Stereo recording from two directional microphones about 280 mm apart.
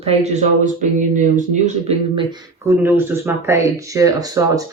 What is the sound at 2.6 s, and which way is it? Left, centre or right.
Speech, centre.